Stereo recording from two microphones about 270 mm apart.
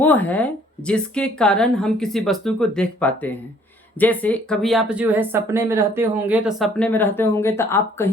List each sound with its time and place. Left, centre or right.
0.0 s speech: centre